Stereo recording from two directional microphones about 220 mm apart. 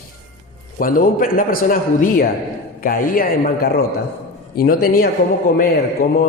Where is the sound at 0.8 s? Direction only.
40° left (ahead or behind).